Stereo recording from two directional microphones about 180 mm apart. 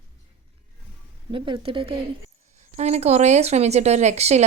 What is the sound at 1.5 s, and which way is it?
A woman's voice, 30° right (ahead or behind).